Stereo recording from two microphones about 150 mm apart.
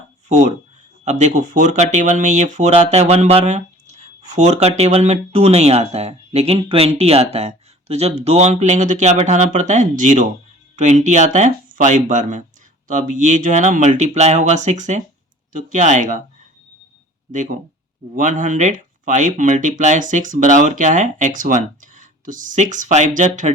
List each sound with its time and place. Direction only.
0.3 s speech: 50° right (ahead or behind)
17.3 s speech: 60° right (ahead or behind)